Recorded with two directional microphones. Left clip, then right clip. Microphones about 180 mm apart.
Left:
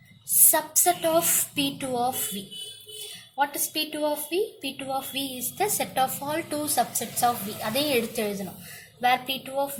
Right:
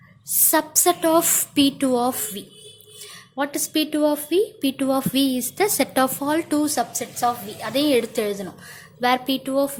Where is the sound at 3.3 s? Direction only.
45° right (ahead or behind); by 8.3 s 30° right (ahead or behind).